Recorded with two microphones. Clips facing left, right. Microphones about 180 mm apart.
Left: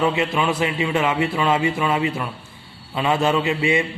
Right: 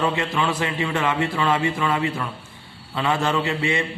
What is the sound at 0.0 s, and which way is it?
A man's voice, 15° left (ahead or behind).